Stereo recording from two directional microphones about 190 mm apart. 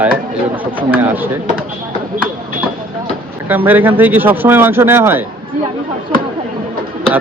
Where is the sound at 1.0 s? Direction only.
10° right (ahead or behind).